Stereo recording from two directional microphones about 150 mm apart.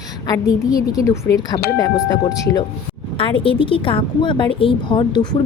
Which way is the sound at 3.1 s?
35° left (ahead or behind).